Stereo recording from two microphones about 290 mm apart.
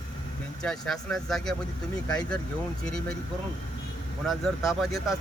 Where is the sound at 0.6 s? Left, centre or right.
Centre.